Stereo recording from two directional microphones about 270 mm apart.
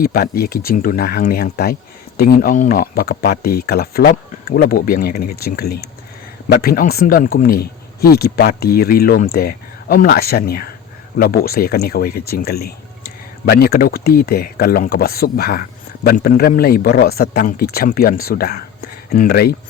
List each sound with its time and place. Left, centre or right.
0.0 s speech: left